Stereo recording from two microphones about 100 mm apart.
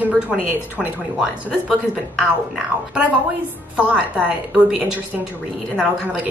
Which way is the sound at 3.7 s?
15° right (ahead or behind).